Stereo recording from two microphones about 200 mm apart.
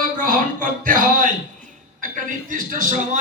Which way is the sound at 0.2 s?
45° right (ahead or behind).